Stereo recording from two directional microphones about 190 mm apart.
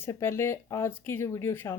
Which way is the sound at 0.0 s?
15° left (ahead or behind).